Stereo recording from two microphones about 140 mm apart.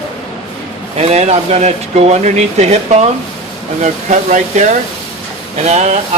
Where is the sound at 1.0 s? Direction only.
50° right (ahead or behind).